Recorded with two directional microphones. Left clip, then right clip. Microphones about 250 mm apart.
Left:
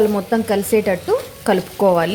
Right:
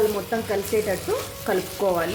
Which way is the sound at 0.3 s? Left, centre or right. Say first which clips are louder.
Left 7 dB; left.